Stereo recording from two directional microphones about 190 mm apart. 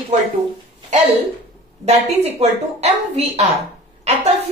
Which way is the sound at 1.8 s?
35° right (ahead or behind).